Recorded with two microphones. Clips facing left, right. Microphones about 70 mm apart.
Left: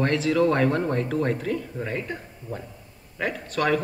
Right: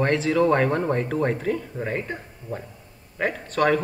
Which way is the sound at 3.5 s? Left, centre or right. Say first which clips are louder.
Right 3 dB; centre.